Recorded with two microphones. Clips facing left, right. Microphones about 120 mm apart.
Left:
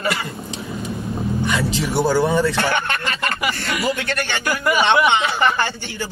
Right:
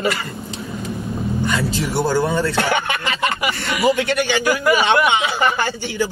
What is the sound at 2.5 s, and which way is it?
Speech, 10° right (ahead or behind).